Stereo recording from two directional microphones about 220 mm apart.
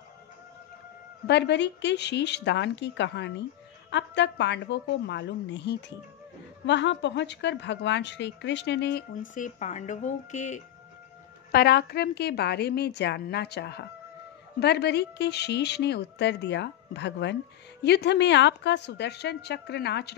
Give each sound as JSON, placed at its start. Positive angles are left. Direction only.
{"t": 1.2, "sound": "speech", "side_deg": 50}
{"t": 9.3, "sound": "speech", "side_deg": 35}
{"t": 11.5, "sound": "speech", "side_deg": 45}